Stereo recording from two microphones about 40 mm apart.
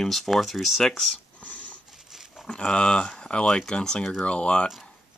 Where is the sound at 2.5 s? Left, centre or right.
Left.